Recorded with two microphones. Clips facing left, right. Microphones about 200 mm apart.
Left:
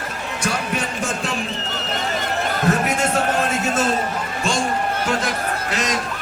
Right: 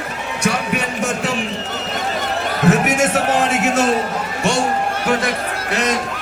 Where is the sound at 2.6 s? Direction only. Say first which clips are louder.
Right 6 dB; 75° right (ahead or behind).